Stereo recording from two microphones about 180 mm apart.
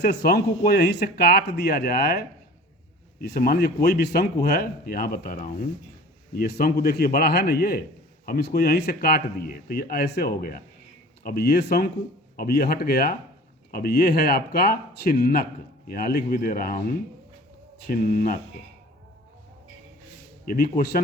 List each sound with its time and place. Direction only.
0.0 s speech: 65° left (ahead or behind)
20.5 s speech: 55° left (ahead or behind)